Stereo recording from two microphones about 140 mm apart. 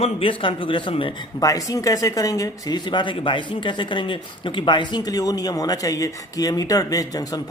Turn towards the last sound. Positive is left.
turn(degrees=25)  # may be behind; listen again after turning